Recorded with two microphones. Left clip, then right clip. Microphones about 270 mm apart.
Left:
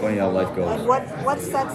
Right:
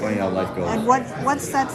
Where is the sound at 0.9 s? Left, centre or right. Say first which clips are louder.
Right 3 dB; right.